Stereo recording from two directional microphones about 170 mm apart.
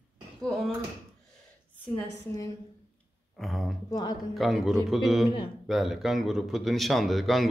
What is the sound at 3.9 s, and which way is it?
Speech, 25° left (ahead or behind).